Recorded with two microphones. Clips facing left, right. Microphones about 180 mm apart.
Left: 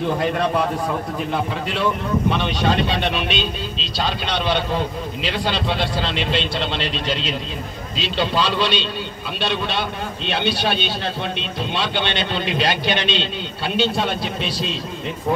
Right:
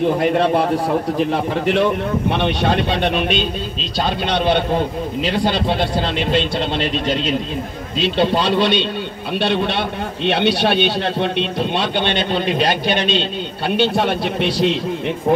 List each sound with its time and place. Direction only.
0.6 s a man's voice: 35° right (ahead or behind)
1.5 s a man's voice: 55° right (ahead or behind)
13.7 s a man's voice: 60° right (ahead or behind)